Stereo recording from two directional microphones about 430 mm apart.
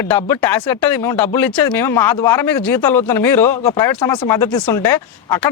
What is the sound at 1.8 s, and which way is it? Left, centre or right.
Speech, centre.